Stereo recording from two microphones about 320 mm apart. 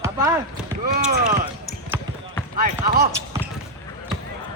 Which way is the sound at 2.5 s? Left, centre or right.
Right.